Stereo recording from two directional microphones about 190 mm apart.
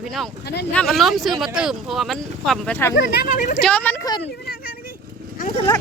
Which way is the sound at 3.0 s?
50° left (ahead or behind).